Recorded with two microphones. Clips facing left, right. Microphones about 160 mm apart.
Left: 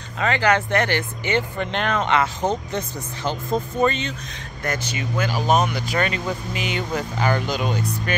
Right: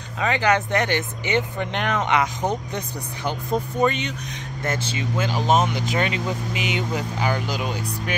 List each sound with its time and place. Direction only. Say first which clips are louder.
0.2 s speech: left 1 dB; 15° right (ahead or behind)
4.6 s speech: even; 25° right (ahead or behind); by 8.2 s 10° right (ahead or behind)